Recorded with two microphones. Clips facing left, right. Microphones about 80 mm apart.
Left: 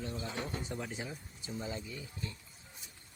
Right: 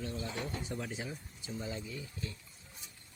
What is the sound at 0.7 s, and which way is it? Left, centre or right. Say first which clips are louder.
Speech: even; centre.